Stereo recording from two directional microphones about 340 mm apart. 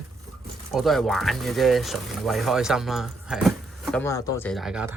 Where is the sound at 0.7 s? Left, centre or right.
Centre.